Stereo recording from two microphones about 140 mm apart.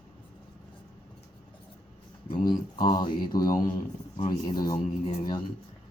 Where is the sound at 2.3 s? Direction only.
30° left (ahead or behind).